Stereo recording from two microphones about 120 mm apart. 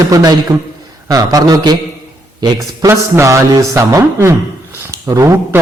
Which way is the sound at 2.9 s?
25° right (ahead or behind).